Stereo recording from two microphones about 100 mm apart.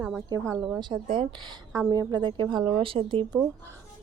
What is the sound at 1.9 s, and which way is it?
Speech, 45° right (ahead or behind).